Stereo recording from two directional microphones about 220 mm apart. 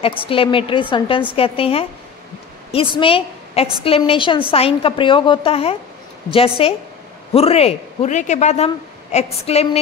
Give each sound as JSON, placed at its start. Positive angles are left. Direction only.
{"t": 0.2, "sound": "a woman's voice", "side_deg": 25}
{"t": 3.0, "sound": "a woman's voice", "side_deg": 25}